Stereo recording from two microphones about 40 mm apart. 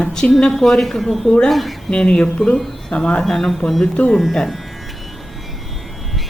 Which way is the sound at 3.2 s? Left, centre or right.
Centre.